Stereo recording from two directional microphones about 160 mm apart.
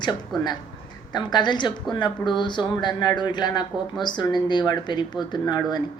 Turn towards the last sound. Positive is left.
turn(degrees=25)  # may be behind; listen again after turning